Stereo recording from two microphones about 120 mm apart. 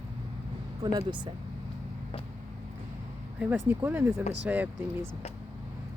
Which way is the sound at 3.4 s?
15° right (ahead or behind).